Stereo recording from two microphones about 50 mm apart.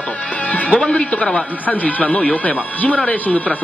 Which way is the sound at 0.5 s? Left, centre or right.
Left.